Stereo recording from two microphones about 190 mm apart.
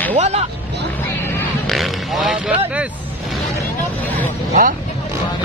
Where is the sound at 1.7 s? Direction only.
Centre (ahead or behind).